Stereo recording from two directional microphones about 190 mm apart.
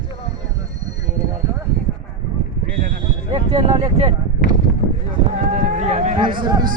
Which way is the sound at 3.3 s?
30° right (ahead or behind).